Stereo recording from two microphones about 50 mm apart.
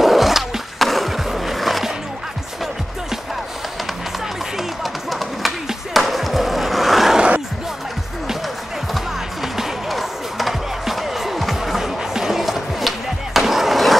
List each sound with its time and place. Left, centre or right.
0.0 s skateboard: centre
4.6 s a sound: centre
8.9 s music: centre